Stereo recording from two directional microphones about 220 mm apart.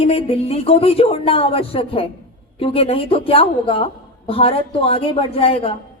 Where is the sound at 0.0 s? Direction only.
25° left (ahead or behind).